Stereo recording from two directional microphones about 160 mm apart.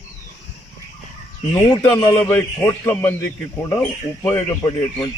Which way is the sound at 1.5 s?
20° left (ahead or behind).